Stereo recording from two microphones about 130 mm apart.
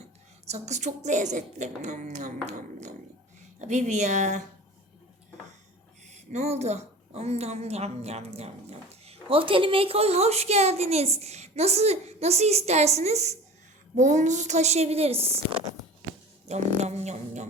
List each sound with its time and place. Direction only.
0.5 s a woman's voice: 60° right (ahead or behind)
6.1 s a woman's voice: 55° right (ahead or behind)
13.9 s a woman's voice: 65° right (ahead or behind)